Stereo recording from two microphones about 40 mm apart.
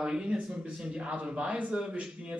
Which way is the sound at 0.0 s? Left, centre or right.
Right.